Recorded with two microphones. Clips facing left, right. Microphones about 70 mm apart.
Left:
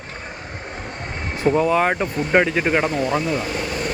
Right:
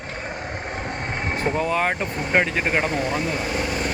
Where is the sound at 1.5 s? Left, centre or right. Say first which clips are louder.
Left 6 dB; centre.